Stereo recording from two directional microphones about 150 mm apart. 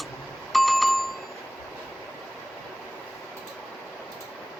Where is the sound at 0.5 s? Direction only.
Centre (ahead or behind).